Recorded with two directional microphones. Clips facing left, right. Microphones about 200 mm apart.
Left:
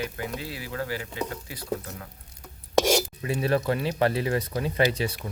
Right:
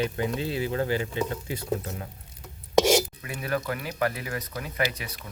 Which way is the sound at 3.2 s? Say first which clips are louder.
Left 5 dB; 30° left (ahead or behind).